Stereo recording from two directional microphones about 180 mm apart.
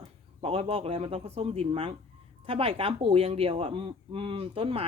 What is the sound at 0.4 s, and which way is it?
Speech, 35° right (ahead or behind).